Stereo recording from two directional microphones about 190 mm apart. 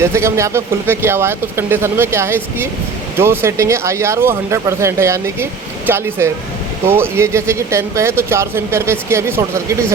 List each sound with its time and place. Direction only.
0.0 s speech: 15° right (ahead or behind)